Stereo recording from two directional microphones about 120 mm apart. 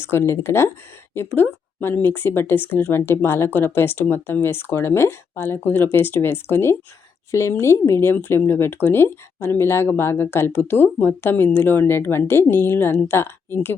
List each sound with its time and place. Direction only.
0.0 s speech: 20° left (ahead or behind)